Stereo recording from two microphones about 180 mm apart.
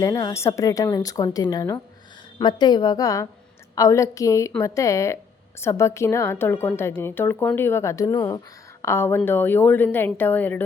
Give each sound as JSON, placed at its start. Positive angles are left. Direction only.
{"t": 0.0, "sound": "a woman's voice", "side_deg": 20}